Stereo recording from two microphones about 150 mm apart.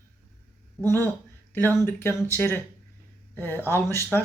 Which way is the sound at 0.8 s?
15° left (ahead or behind).